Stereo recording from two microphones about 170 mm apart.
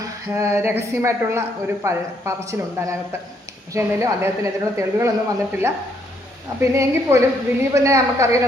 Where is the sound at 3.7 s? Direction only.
15° right (ahead or behind).